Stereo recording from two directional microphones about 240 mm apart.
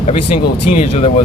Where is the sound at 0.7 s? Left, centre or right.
Left.